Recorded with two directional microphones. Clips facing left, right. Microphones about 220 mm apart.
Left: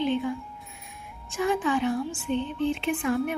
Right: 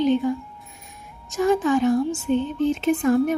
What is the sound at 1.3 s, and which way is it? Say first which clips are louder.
Speech: right 6 dB; 45° right (ahead or behind).